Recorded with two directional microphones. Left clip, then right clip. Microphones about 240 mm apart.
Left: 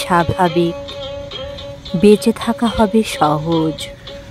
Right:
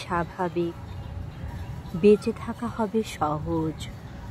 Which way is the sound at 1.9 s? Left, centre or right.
Left.